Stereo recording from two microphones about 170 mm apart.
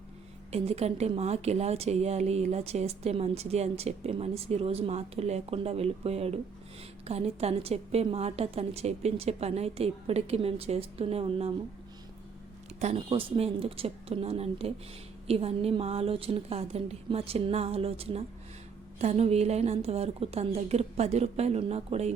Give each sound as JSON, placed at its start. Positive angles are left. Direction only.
{"t": 0.5, "sound": "a woman's voice", "side_deg": -40}
{"t": 12.8, "sound": "a woman's voice", "side_deg": -35}